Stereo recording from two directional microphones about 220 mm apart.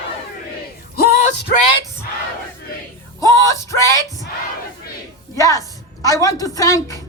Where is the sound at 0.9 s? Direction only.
45° left (ahead or behind).